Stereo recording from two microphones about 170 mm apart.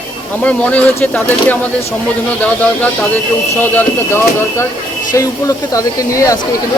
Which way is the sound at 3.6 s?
15° left (ahead or behind).